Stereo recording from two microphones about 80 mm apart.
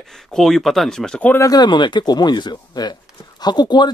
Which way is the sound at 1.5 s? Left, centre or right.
Left.